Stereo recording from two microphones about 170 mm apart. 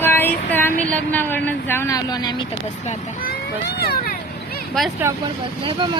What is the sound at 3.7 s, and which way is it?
Speech, 65° left (ahead or behind).